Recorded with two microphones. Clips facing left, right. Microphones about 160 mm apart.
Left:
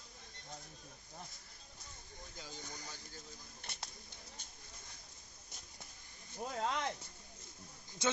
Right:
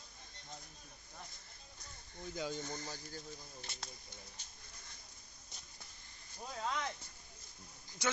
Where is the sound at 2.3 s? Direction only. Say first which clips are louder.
Right 13 dB; 80° right.